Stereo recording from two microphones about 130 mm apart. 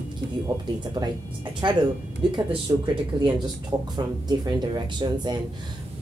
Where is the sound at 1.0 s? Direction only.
30° right (ahead or behind).